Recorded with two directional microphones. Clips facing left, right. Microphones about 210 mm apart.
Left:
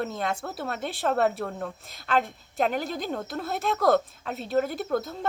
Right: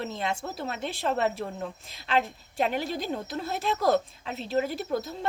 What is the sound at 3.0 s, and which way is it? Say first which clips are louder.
Speech: left 1 dB; centre (ahead or behind).